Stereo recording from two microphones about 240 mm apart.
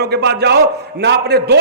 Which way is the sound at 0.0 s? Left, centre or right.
Right.